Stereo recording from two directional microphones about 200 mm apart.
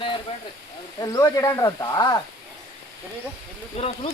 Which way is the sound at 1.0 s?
15° left (ahead or behind).